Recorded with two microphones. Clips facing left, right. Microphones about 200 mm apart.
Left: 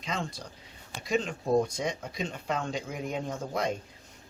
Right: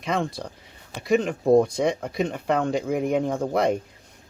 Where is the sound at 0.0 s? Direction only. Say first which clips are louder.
Right 9 dB; 60° right (ahead or behind).